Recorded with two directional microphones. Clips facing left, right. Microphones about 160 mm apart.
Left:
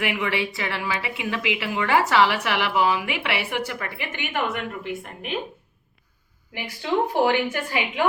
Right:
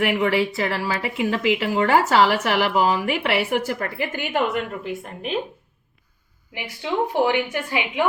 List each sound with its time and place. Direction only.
0.0 s speech: 40° right (ahead or behind)
6.5 s a woman's voice: 15° right (ahead or behind)